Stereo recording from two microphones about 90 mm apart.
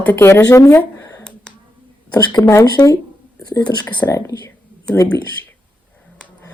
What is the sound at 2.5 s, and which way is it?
Speech, 40° left (ahead or behind).